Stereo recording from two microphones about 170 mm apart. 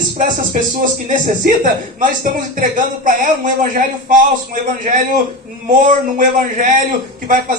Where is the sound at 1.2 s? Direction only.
50° right (ahead or behind).